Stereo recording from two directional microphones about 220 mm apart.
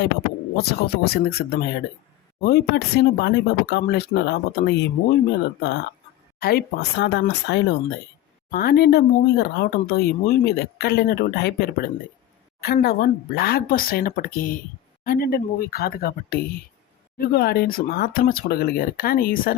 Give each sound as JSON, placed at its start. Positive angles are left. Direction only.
{"t": 0.5, "sound": "speech", "side_deg": 45}
{"t": 6.4, "sound": "speech", "side_deg": 45}